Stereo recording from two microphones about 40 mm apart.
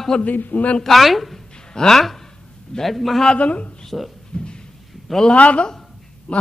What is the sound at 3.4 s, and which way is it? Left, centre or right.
Speech, left.